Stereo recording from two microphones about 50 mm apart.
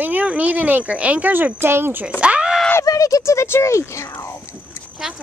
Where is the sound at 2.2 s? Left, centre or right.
Right.